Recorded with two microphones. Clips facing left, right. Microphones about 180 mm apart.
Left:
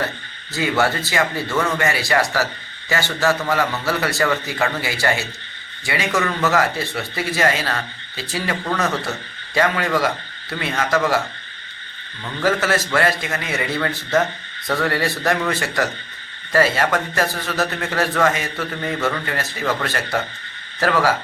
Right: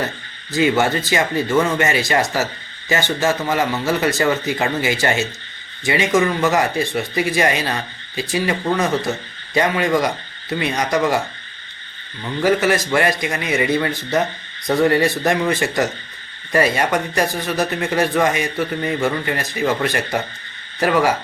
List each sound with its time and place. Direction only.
0.5 s a man's voice: 20° right (ahead or behind)
12.4 s a man's voice: 15° right (ahead or behind)